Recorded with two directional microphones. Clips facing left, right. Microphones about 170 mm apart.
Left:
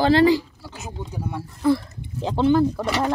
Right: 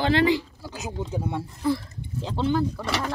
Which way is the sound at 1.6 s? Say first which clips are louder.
Left 6 dB; 60° left (ahead or behind).